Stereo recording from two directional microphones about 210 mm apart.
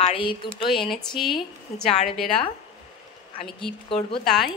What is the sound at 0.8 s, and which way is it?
A woman's voice, centre (ahead or behind).